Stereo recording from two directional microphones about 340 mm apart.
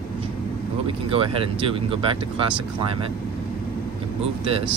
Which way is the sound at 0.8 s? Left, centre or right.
Centre.